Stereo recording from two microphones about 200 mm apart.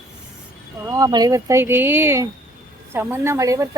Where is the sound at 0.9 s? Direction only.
20° right (ahead or behind).